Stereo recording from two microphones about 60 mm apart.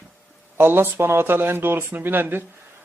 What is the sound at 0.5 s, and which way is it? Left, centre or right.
Speech, right.